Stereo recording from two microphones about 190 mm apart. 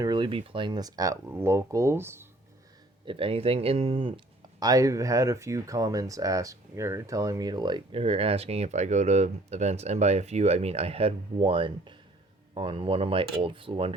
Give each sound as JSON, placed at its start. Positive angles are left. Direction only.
{"t": 0.0, "sound": "speech", "side_deg": -25}
{"t": 3.1, "sound": "speech", "side_deg": -30}
{"t": 4.6, "sound": "speech", "side_deg": -20}